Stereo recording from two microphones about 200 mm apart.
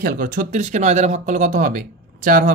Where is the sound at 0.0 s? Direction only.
45° right (ahead or behind).